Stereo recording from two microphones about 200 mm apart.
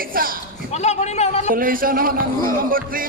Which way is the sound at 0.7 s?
35° left (ahead or behind).